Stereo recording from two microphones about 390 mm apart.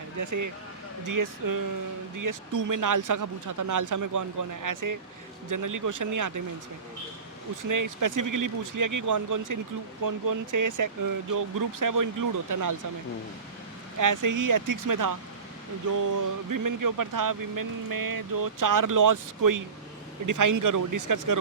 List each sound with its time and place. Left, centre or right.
0.2 s speech: right
7.6 s speech: right
14.0 s speech: right